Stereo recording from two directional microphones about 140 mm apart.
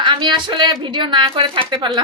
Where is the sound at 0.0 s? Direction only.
35° right (ahead or behind).